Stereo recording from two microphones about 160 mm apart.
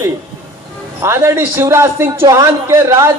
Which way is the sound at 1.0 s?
15° right (ahead or behind).